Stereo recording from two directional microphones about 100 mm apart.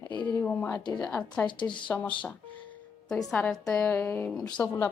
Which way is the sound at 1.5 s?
55° left (ahead or behind).